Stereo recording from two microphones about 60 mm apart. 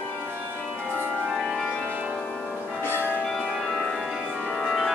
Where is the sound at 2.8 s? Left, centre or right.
Left.